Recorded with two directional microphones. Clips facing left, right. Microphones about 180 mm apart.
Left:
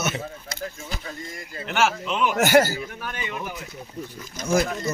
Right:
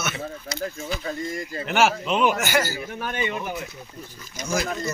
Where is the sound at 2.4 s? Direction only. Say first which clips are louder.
Left 6 dB; 60° left (ahead or behind).